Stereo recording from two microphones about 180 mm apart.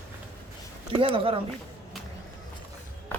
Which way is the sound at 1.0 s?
30° right (ahead or behind).